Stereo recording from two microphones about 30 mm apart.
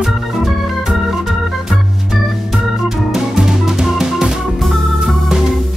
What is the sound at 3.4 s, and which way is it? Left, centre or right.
Music, centre.